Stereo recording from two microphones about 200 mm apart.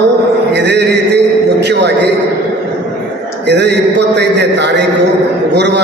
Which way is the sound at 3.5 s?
60° right (ahead or behind).